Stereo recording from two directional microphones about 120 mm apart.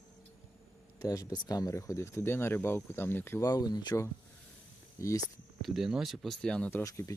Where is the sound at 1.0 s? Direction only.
30° left (ahead or behind).